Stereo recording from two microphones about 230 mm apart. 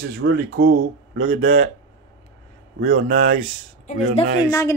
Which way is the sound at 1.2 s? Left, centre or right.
Right.